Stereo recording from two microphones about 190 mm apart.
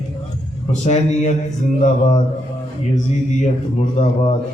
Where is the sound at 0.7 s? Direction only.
35° left (ahead or behind).